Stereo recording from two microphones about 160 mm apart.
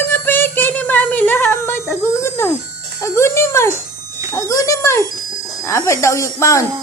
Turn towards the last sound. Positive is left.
turn(degrees=20)  # may be behind; listen again after turning